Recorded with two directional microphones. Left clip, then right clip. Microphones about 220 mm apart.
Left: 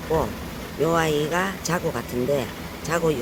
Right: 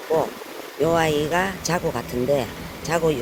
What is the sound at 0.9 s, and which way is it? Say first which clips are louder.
Speech: right 2 dB; 5° right (ahead or behind).